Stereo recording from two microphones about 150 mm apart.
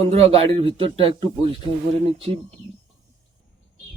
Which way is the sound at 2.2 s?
40° right (ahead or behind).